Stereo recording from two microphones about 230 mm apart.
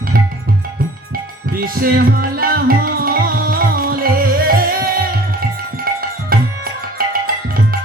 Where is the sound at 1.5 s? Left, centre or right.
Right.